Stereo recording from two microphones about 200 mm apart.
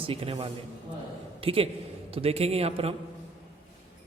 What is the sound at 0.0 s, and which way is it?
A man's voice, 30° right (ahead or behind).